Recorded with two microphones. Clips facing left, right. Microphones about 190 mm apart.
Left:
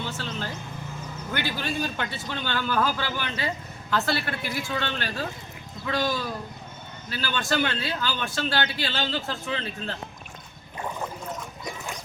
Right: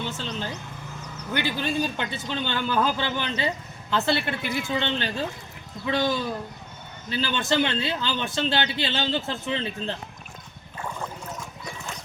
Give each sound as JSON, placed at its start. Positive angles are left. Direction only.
{"t": 0.0, "sound": "vehicle", "side_deg": -20}
{"t": 1.3, "sound": "a man's voice", "side_deg": -15}